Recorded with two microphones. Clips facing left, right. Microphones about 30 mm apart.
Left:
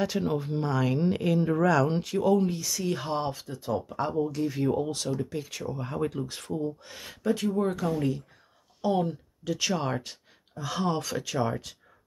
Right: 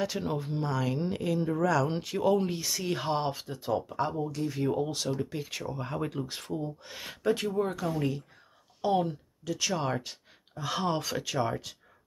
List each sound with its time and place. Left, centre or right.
0.0 s speech: centre
0.6 s speech: centre
1.9 s speech: centre
2.2 s speech: right
4.1 s speech: centre
7.4 s speech: centre
8.8 s speech: right
9.4 s speech: centre
10.5 s speech: centre